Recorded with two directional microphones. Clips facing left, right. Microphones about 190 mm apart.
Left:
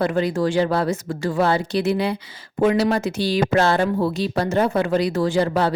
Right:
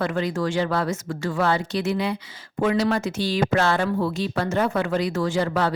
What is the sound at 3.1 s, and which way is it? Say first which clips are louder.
Speech: left 3 dB; 10° left (ahead or behind).